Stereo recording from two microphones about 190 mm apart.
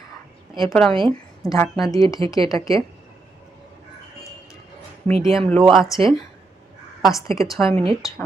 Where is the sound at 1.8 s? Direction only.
20° left (ahead or behind).